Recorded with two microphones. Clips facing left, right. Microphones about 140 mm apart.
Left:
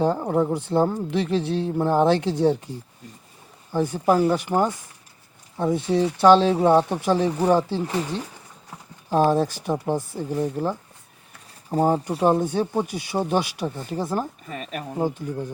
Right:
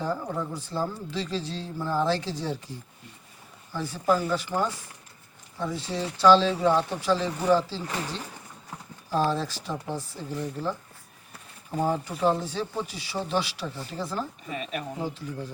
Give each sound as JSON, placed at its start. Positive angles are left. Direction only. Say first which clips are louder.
{"t": 0.0, "sound": "speech", "louder": "left 9 dB", "side_deg": 60}
{"t": 3.7, "sound": "speech", "louder": "left 5 dB", "side_deg": 55}
{"t": 12.3, "sound": "speech", "louder": "left 7 dB", "side_deg": 50}